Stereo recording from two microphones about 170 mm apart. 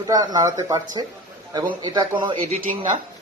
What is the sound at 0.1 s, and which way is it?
Speech, 20° right (ahead or behind).